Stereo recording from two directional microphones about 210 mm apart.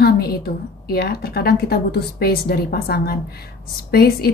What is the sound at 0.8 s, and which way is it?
Speech, 45° left (ahead or behind).